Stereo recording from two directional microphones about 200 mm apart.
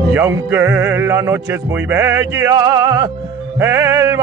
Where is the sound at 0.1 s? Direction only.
15° right (ahead or behind).